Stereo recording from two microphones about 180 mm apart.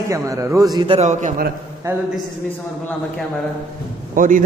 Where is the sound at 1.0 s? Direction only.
40° right (ahead or behind).